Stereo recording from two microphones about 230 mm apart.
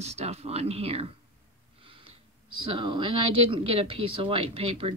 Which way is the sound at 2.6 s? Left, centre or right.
Right.